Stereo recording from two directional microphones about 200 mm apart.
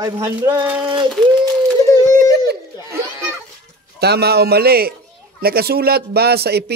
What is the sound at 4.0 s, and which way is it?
Speech, 55° right (ahead or behind).